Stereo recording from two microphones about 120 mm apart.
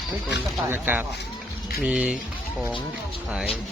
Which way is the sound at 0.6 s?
20° right (ahead or behind).